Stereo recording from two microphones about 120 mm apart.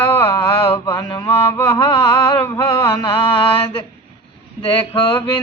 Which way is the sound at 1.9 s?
45° left (ahead or behind).